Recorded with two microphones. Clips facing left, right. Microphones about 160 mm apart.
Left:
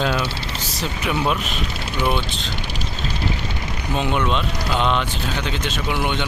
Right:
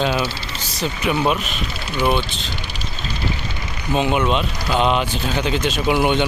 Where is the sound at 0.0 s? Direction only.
5° right (ahead or behind).